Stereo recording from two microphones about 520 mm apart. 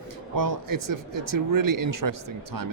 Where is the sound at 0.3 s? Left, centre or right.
Right.